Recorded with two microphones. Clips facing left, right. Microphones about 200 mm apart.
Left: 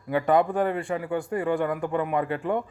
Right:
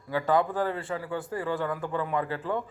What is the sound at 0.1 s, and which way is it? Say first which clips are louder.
A man's voice: left 4 dB; 20° left (ahead or behind).